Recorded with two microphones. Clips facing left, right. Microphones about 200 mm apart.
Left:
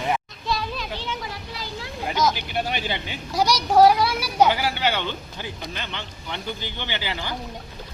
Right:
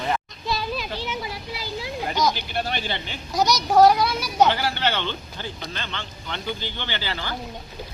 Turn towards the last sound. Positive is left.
turn(degrees=15)  # may be behind; listen again after turning